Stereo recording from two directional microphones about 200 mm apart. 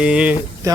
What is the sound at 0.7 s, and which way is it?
Speech, 15° right (ahead or behind).